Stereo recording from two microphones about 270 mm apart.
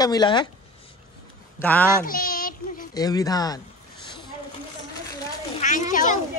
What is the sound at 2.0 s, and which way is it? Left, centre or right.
Child singing, left.